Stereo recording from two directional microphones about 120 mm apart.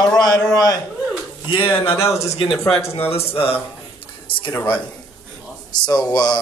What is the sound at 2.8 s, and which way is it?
Speech, 20° left (ahead or behind).